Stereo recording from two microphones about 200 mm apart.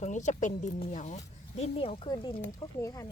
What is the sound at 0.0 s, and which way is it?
Speech, 35° left (ahead or behind).